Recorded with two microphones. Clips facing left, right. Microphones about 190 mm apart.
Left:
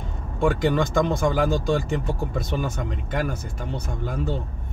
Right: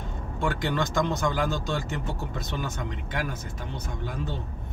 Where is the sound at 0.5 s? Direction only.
55° left (ahead or behind).